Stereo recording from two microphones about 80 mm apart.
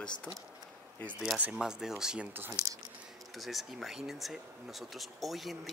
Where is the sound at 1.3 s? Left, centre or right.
Centre.